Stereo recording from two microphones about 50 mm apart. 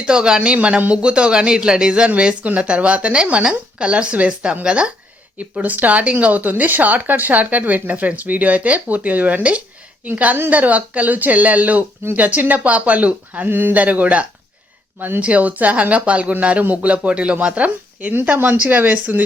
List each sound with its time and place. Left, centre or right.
0.0 s a woman's voice: centre
13.5 s speech: right
13.7 s speech: right
14.9 s speech: right
15.2 s a woman's voice: right